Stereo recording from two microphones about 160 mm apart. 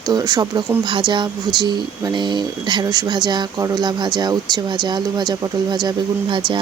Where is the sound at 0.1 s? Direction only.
25° right (ahead or behind).